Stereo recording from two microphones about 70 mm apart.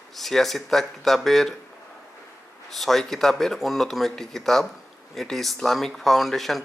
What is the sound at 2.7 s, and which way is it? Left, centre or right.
Speech, centre.